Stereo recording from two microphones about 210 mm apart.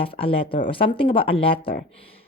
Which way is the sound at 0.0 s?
25° left (ahead or behind).